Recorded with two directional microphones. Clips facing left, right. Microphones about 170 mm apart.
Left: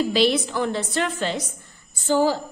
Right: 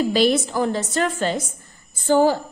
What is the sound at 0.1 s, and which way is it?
A woman's voice, 45° right (ahead or behind).